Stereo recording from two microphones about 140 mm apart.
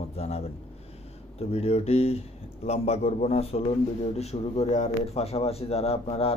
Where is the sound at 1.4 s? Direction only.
45° left (ahead or behind).